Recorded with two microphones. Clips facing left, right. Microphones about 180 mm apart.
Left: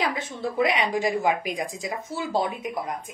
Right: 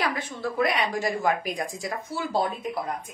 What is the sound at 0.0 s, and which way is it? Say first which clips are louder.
A woman's voice: left 1 dB; 20° left (ahead or behind).